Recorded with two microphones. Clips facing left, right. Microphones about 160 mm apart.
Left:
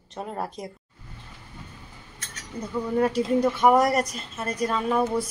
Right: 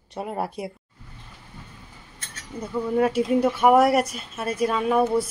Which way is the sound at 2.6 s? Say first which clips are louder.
Right 2 dB; 5° right (ahead or behind).